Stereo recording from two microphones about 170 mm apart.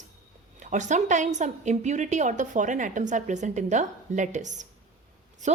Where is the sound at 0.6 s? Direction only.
45° right (ahead or behind).